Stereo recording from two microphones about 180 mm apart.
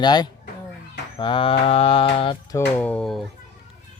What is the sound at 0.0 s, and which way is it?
Mantra, 25° left (ahead or behind).